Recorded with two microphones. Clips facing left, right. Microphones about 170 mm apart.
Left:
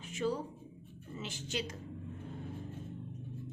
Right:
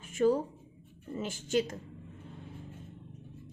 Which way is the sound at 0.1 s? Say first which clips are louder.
Right 8 dB; 50° right (ahead or behind).